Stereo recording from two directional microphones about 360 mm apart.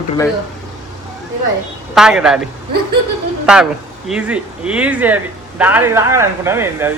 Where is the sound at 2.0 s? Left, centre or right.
Centre.